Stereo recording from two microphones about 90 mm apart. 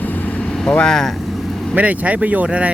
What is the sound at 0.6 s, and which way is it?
Speech, 10° left (ahead or behind).